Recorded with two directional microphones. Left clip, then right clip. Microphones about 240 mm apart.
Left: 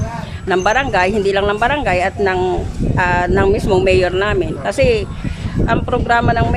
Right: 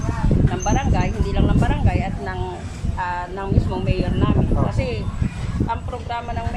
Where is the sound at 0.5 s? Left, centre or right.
Left.